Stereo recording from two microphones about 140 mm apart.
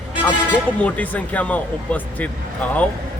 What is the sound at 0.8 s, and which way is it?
Speech, 10° left (ahead or behind).